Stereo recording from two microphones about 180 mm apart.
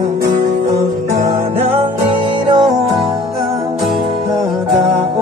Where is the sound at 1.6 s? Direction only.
35° right (ahead or behind).